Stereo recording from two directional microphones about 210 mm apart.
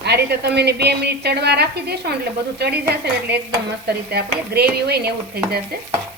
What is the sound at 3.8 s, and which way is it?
A woman's voice, 50° right (ahead or behind).